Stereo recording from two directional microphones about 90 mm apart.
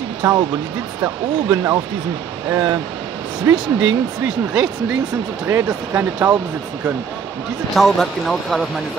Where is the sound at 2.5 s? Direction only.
25° right (ahead or behind).